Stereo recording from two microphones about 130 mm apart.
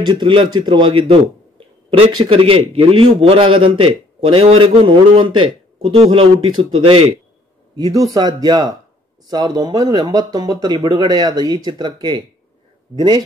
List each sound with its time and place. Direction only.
0.0 s a man's voice: 40° right (ahead or behind)
5.9 s a man's voice: 50° right (ahead or behind)
7.7 s speech: 30° right (ahead or behind)